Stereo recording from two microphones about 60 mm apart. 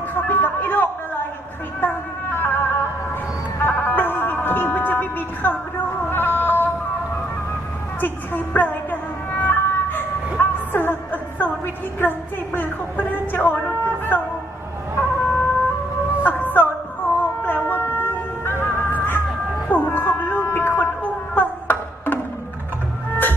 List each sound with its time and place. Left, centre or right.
0.1 s a man's voice: left
1.8 s music: left
8.0 s a woman's voice: left
9.3 s music: left
15.0 s emergency vehicle: left
16.2 s music: left
17.2 s a sound: left
18.6 s music: left
19.7 s a sound: left